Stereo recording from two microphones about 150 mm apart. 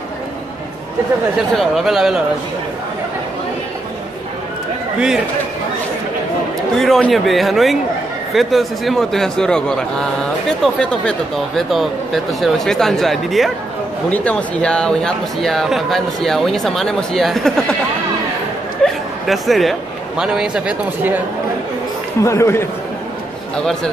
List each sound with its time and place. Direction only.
1.5 s speech: centre (ahead or behind)
6.8 s speech: centre (ahead or behind)
18.8 s chuckle: 5° left (ahead or behind)
19.2 s a man's voice: centre (ahead or behind)
22.2 s a man's voice: 20° left (ahead or behind)
23.5 s speech: 5° left (ahead or behind)